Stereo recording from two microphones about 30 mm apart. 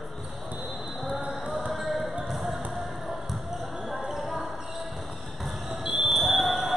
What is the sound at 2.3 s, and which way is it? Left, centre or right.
Basketball bounce, centre.